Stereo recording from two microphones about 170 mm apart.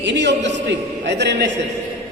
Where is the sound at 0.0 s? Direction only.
90° right.